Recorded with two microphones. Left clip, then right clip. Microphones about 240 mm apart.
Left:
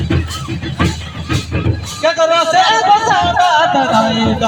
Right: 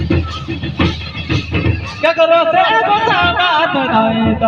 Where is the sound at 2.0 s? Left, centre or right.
Left.